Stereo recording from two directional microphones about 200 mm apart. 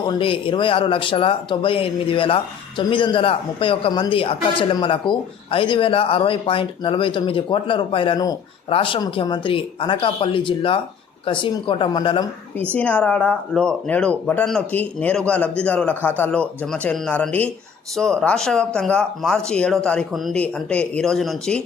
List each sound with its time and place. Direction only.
0.0 s a man's voice: 25° left (ahead or behind)
12.7 s speech: 5° left (ahead or behind)